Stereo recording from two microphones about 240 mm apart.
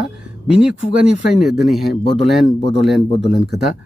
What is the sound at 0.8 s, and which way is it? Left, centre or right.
Speech, right.